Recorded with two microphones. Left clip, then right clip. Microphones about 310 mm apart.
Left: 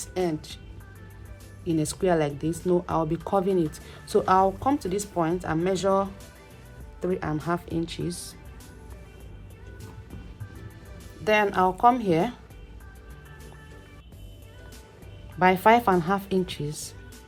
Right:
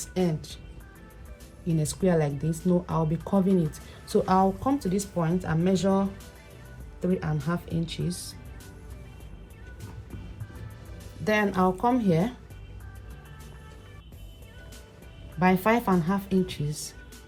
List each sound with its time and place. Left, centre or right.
0.0 s speech: left
1.6 s speech: left
11.2 s speech: left
15.4 s speech: left